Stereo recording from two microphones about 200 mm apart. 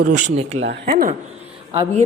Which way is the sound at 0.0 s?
40° right (ahead or behind).